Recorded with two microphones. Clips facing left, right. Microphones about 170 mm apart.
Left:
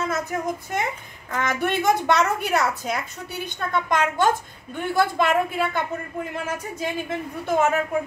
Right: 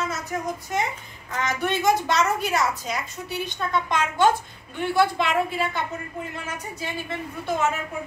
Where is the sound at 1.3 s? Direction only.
55° left (ahead or behind).